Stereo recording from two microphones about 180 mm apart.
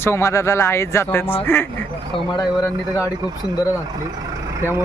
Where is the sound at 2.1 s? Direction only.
25° left (ahead or behind).